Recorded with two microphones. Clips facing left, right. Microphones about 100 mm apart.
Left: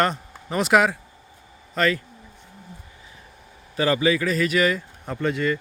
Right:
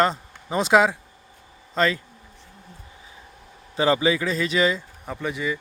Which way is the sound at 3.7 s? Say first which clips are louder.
Even; 25° right (ahead or behind).